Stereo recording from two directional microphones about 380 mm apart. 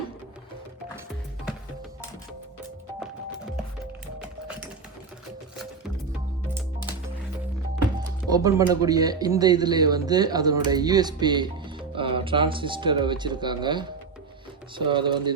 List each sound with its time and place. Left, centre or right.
8.3 s speech: centre